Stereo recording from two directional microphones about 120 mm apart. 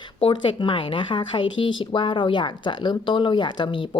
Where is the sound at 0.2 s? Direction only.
45° left (ahead or behind).